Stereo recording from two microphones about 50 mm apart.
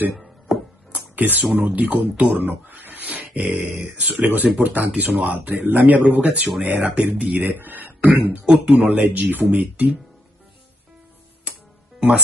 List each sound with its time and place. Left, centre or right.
0.2 s music: centre
0.9 s speech: right
11.5 s music: right